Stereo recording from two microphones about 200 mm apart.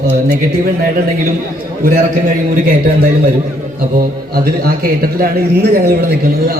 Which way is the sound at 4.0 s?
50° right (ahead or behind).